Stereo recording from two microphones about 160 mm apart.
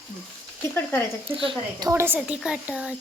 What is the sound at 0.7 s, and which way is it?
Speech, 15° left (ahead or behind).